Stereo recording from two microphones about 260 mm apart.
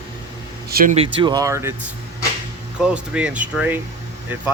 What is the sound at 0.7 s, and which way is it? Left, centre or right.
Speech, right.